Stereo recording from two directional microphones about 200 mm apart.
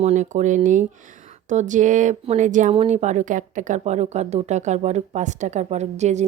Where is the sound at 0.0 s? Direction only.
35° right (ahead or behind).